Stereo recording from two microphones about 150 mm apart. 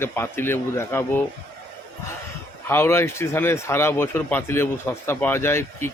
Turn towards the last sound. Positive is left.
turn(degrees=15)  # may be behind; listen again after turning